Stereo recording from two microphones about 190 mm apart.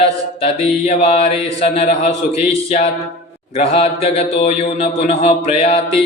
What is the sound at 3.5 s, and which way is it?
A man's voice, 30° left (ahead or behind).